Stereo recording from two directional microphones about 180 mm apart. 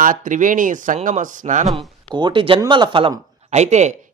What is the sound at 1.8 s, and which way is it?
A man's voice, 25° right (ahead or behind).